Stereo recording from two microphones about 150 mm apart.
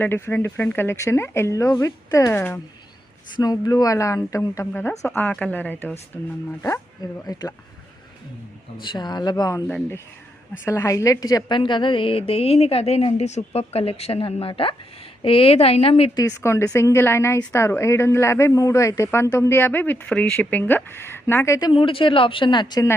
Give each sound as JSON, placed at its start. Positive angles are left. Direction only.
{"t": 0.0, "sound": "a woman's voice", "side_deg": 15}
{"t": 3.3, "sound": "a woman's voice", "side_deg": 25}
{"t": 7.0, "sound": "speech", "side_deg": 25}
{"t": 8.8, "sound": "speech", "side_deg": 30}
{"t": 9.6, "sound": "a woman's voice", "side_deg": 10}
{"t": 10.7, "sound": "a woman's voice", "side_deg": 20}
{"t": 16.1, "sound": "a woman's voice", "side_deg": 20}
{"t": 21.7, "sound": "a woman's voice", "side_deg": 35}